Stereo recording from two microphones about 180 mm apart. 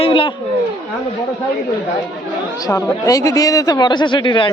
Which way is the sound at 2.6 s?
20° left (ahead or behind).